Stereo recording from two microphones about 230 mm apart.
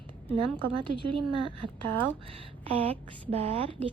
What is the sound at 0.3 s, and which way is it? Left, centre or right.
Speech, right.